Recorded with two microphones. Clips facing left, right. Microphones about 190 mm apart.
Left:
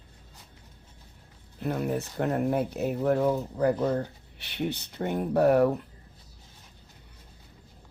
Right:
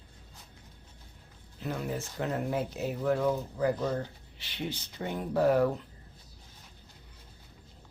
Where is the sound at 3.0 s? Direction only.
40° left (ahead or behind); by 5.7 s 65° left (ahead or behind).